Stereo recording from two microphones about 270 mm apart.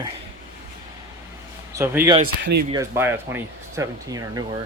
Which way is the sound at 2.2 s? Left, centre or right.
Right.